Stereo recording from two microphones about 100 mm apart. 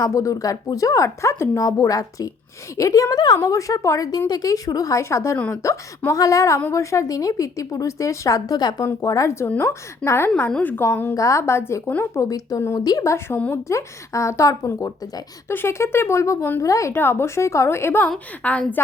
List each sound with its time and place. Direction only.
0.0 s a woman's voice: 35° left (ahead or behind); by 10.8 s 15° left (ahead or behind)
11.1 s a woman's voice: 30° left (ahead or behind)
12.2 s a woman's voice: 35° left (ahead or behind)
18.4 s a woman's voice: 15° left (ahead or behind)